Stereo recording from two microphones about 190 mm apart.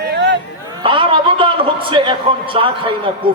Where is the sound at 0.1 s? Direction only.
65° right (ahead or behind).